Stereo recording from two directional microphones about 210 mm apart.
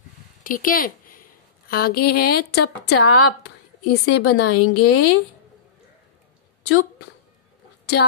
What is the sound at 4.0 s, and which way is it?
Speech, 90° left.